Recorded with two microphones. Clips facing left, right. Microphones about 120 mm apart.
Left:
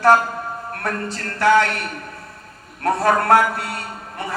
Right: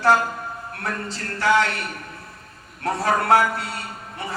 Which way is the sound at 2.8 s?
55° left (ahead or behind).